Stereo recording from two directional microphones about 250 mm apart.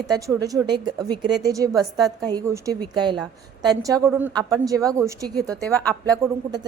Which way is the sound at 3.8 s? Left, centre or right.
Centre.